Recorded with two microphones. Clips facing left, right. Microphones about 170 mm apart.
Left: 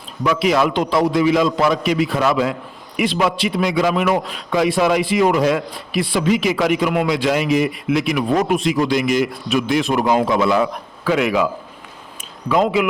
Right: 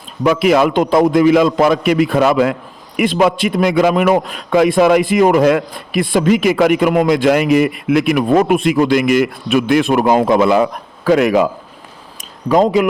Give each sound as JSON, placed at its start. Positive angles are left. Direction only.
{"t": 0.3, "sound": "a man's voice", "side_deg": -55}
{"t": 12.5, "sound": "speech", "side_deg": -40}